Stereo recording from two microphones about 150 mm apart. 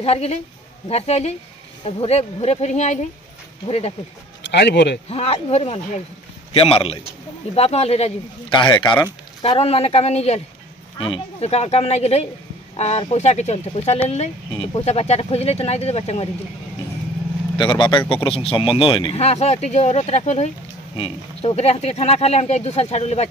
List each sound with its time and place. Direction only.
0.0 s speech: 45° left (ahead or behind)
4.6 s speech: 90° left
5.1 s speech: 45° left (ahead or behind)
8.5 s speech: 30° left (ahead or behind)
17.6 s speech: 30° left (ahead or behind)
19.1 s speech: 45° left (ahead or behind)